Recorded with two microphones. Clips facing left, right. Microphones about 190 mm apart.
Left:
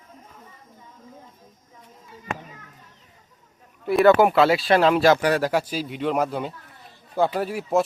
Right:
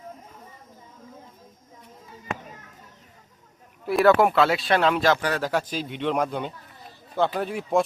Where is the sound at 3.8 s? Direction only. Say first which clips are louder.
Left 2 dB; centre (ahead or behind).